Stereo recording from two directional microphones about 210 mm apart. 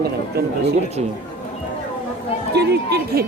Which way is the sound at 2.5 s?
50° right (ahead or behind).